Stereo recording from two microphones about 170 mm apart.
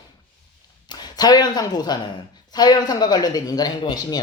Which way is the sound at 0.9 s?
25° left (ahead or behind).